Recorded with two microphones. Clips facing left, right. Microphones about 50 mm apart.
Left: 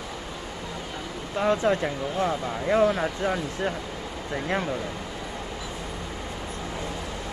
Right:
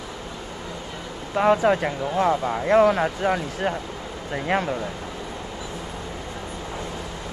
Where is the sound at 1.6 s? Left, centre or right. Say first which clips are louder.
Right 3 dB; right.